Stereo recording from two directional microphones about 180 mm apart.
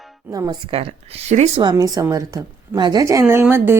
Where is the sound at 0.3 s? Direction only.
20° right (ahead or behind); by 1.6 s 40° right (ahead or behind).